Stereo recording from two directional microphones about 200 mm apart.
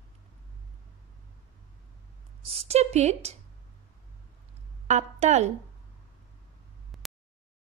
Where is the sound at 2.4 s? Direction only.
30° right (ahead or behind).